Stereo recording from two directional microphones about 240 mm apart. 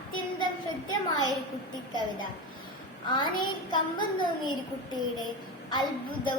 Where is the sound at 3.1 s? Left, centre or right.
Centre.